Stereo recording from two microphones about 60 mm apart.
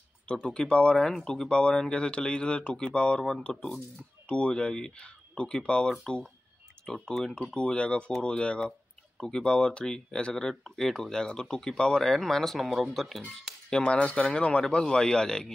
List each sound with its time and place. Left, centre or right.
0.3 s speech: centre
13.5 s speech: centre